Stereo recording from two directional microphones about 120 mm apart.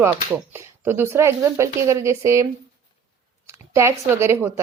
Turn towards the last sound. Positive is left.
turn(degrees=-25)  # may be behind; listen again after turning